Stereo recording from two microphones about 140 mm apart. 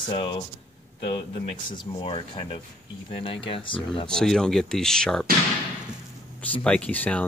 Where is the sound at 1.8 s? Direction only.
35° left (ahead or behind).